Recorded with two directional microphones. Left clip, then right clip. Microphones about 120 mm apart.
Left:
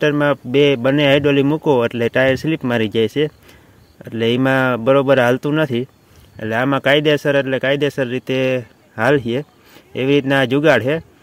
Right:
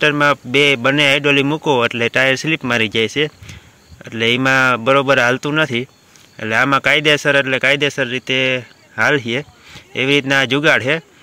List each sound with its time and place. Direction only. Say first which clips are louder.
0.0 s speech: right 2 dB; 35° left (ahead or behind)